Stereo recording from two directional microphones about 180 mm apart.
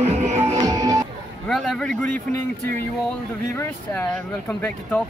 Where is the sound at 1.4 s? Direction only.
5° left (ahead or behind).